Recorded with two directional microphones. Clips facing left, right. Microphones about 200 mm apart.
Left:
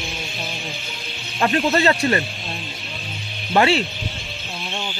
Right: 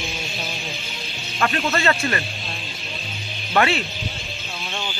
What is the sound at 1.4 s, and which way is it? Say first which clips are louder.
Speech: left 4 dB; 25° left (ahead or behind).